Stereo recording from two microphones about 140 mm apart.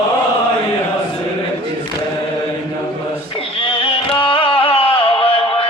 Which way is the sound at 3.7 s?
40° left (ahead or behind).